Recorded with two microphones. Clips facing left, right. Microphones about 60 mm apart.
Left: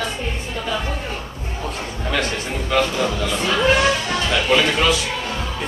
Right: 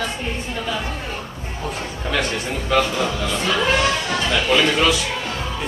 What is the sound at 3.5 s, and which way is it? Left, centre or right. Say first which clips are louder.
Speech: left 3 dB; centre.